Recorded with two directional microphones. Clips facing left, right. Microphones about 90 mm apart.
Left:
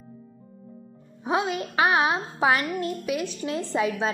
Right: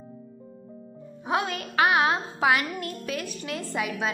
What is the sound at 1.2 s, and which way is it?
A woman's voice, 20° left (ahead or behind).